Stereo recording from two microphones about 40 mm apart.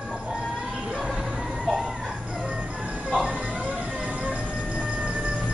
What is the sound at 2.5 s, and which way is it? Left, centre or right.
Music, right.